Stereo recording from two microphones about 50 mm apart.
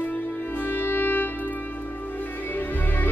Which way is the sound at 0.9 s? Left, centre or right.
Left.